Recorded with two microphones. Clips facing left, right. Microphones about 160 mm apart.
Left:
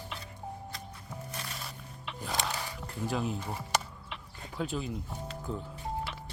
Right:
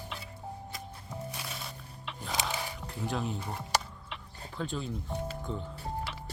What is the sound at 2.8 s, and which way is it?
Speech, centre (ahead or behind).